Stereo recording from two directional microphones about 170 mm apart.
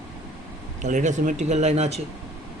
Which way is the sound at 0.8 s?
45° right (ahead or behind).